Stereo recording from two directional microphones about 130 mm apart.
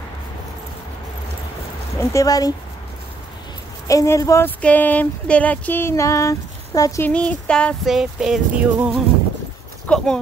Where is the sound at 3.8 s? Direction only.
20° left (ahead or behind).